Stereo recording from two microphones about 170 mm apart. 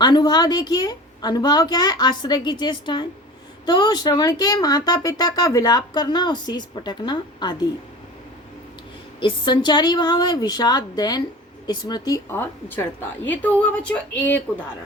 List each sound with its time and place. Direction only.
0.0 s speech: 25° left (ahead or behind)
9.2 s a woman's voice: 30° left (ahead or behind); by 14.4 s 10° left (ahead or behind)